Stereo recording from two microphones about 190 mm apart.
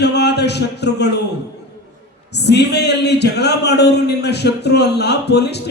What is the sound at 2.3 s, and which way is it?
Speech, 60° left (ahead or behind).